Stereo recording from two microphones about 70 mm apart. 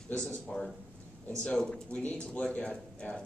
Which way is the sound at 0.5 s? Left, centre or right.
Centre.